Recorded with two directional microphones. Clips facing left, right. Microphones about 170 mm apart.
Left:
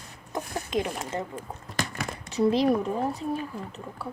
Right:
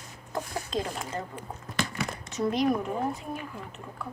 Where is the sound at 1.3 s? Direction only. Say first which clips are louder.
Even; 40° left (ahead or behind).